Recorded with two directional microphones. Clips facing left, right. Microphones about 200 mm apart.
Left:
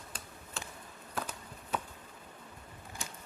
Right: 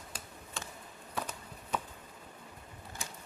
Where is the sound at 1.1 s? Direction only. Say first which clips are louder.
Even; centre (ahead or behind).